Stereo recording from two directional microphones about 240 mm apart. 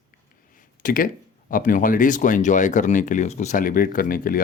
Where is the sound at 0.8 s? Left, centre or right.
Left.